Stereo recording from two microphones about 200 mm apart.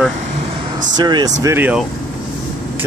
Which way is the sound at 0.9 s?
20° right (ahead or behind).